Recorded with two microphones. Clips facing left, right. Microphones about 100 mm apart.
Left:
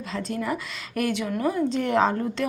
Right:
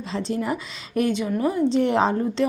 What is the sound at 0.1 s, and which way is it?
Speech, 30° right (ahead or behind).